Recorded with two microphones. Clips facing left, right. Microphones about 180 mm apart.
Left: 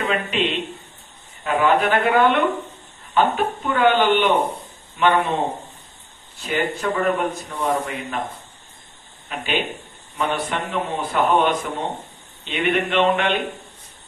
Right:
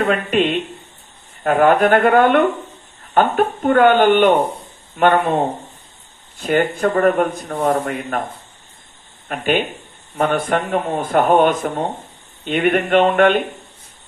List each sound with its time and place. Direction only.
0.0 s speech: 50° right (ahead or behind)
6.3 s speech: 55° right (ahead or behind)
9.3 s speech: 50° right (ahead or behind)